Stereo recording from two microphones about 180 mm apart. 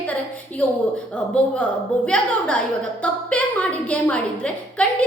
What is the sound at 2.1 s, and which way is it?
A woman's voice, 5° left (ahead or behind).